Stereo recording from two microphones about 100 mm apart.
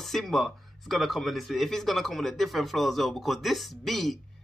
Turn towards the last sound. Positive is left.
turn(degrees=0)  # may be behind; listen again after turning